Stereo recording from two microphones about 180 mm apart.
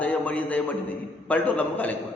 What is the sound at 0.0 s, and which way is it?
A man's voice, 10° left (ahead or behind).